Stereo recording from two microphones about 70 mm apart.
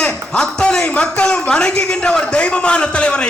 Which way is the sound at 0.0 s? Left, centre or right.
Centre.